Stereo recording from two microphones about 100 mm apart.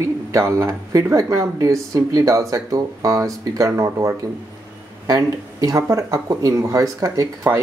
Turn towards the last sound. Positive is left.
turn(degrees=-30)  # may be behind; listen again after turning